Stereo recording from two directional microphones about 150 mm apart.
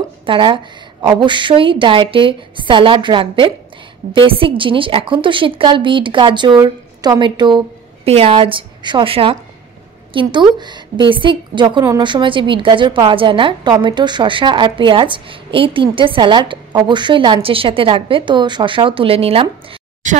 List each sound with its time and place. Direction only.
0.3 s a woman's voice: 30° right (ahead or behind)
10.6 s a woman's voice: 30° right (ahead or behind)
20.0 s speech: 55° right (ahead or behind)